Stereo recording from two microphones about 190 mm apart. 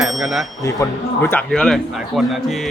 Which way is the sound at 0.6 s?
15° left (ahead or behind).